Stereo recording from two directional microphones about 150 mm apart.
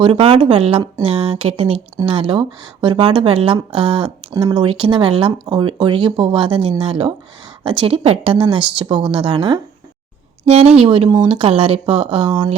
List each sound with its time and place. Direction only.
0.0 s speech: 35° right (ahead or behind)